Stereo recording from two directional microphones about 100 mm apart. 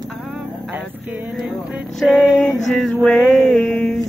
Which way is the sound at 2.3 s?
10° left (ahead or behind).